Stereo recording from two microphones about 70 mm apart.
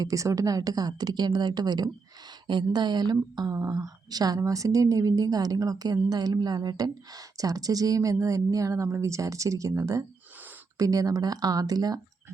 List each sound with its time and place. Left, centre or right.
0.0 s a woman's voice: right
2.5 s speech: right
3.5 s a woman's voice: right